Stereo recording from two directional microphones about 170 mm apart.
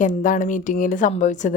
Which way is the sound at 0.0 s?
50° left (ahead or behind).